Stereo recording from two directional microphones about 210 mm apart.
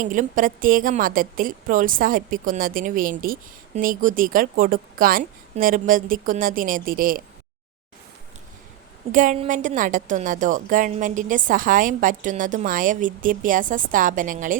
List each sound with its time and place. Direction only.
0.0 s a woman's voice: 40° right (ahead or behind)
9.1 s a woman's voice: 35° right (ahead or behind)